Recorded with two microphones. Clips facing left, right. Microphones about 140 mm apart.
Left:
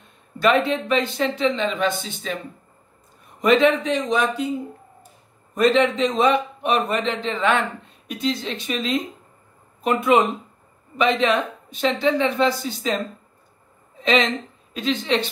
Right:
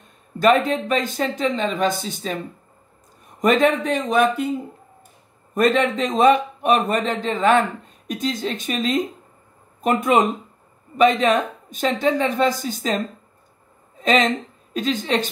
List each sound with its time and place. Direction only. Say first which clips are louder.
0.4 s a man's voice: right 2 dB; 45° right (ahead or behind)
3.3 s a man's voice: even; 45° right (ahead or behind)
14.0 s a woman's voice: right 2 dB; 45° right (ahead or behind)